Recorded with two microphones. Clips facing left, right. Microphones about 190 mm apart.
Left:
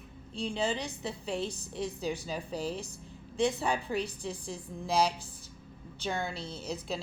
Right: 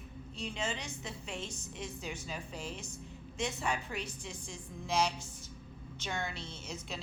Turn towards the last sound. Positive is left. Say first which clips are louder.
# left 7 dB
turn(degrees=35)  # may be behind; listen again after turning